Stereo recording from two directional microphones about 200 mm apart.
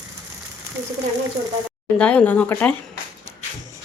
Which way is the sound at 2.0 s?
5° left (ahead or behind).